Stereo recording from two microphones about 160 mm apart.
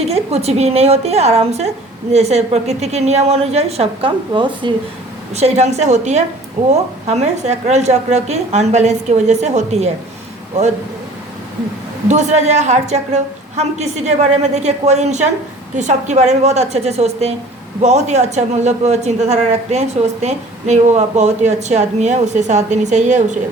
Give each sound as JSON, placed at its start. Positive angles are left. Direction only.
{"t": 0.1, "sound": "a woman's voice", "side_deg": -40}
{"t": 5.3, "sound": "a woman's voice", "side_deg": -45}
{"t": 12.0, "sound": "a woman's voice", "side_deg": -45}